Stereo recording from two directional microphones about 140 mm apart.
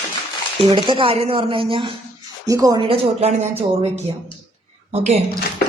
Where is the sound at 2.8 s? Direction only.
45° right (ahead or behind).